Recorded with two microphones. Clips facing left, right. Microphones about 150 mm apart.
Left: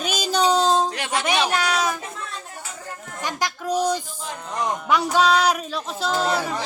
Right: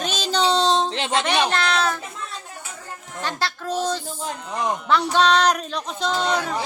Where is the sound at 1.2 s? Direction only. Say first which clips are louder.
Left 1 dB; 10° left (ahead or behind).